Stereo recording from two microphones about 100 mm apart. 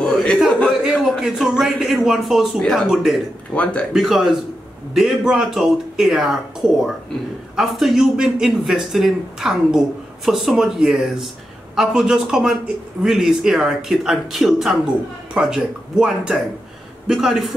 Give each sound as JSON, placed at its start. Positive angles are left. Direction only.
{"t": 0.0, "sound": "a sound", "side_deg": 5}
{"t": 1.0, "sound": "speech", "side_deg": -5}
{"t": 3.5, "sound": "speech", "side_deg": 15}
{"t": 3.9, "sound": "speech", "side_deg": 0}